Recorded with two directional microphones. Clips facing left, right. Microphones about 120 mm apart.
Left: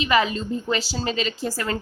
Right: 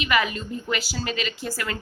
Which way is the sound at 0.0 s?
30° left (ahead or behind).